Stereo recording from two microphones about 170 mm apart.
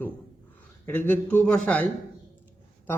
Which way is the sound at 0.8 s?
10° left (ahead or behind).